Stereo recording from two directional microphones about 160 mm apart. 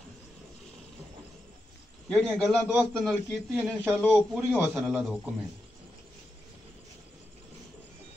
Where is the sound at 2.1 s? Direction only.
5° left (ahead or behind).